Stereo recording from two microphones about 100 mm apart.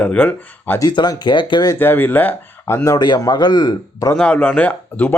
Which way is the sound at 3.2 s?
45° left (ahead or behind).